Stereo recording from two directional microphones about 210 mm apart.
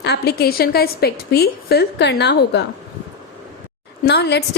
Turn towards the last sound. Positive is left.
turn(degrees=55)  # may be behind; listen again after turning